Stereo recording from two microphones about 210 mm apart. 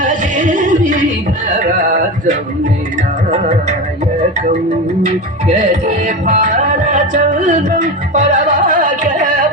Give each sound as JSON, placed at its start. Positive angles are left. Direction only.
{"t": 0.0, "sound": "a sound", "side_deg": -35}
{"t": 1.5, "sound": "music", "side_deg": -40}
{"t": 5.5, "sound": "music", "side_deg": -35}